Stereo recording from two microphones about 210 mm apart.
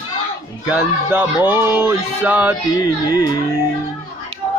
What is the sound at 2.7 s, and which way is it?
Mantra, 20° left (ahead or behind).